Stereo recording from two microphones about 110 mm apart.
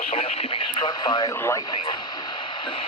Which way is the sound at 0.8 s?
40° left (ahead or behind).